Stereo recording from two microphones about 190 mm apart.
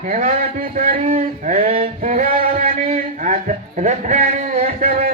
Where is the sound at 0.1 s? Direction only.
40° right (ahead or behind).